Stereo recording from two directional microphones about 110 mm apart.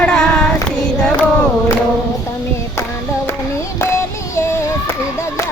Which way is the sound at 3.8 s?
25° left (ahead or behind).